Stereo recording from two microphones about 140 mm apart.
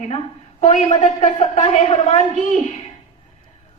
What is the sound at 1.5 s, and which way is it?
Speech, 45° left (ahead or behind).